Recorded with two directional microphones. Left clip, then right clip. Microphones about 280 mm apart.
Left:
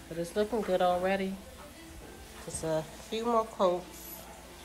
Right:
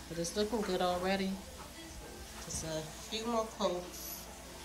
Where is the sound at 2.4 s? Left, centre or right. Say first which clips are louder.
Left 8 dB; centre.